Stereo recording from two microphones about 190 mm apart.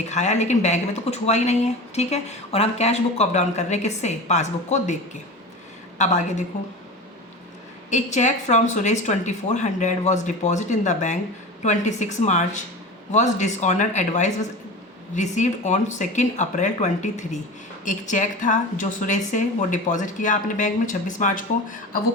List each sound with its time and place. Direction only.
0.1 s a woman's voice: 35° left (ahead or behind)
6.0 s a woman's voice: 40° left (ahead or behind)
7.9 s a woman's voice: 40° left (ahead or behind)